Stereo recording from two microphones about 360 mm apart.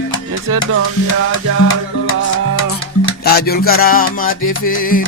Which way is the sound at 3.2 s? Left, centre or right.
Left.